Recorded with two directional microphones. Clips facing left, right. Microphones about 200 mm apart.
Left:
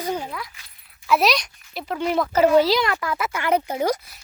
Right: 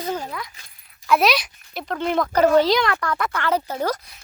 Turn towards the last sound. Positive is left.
turn(degrees=10)  # may be behind; listen again after turning